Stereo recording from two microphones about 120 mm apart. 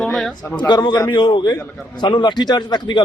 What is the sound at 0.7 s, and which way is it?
A man's voice, 35° left (ahead or behind).